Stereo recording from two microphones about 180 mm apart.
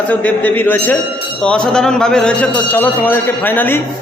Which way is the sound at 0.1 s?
10° left (ahead or behind).